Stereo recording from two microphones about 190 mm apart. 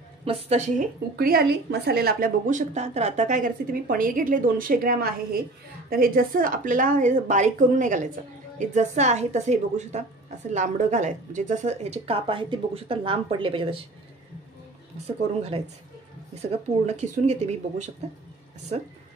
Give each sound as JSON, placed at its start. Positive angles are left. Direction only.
{"t": 0.2, "sound": "speech", "side_deg": -30}
{"t": 1.1, "sound": "a woman's voice", "side_deg": -50}
{"t": 15.0, "sound": "speech", "side_deg": -30}